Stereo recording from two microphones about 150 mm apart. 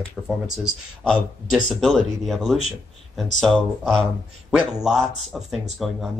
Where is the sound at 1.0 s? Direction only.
5° left (ahead or behind).